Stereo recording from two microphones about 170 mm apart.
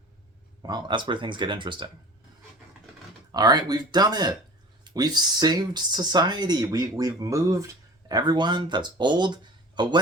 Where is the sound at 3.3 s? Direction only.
25° right (ahead or behind).